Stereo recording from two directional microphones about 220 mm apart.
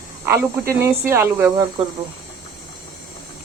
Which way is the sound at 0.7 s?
10° right (ahead or behind).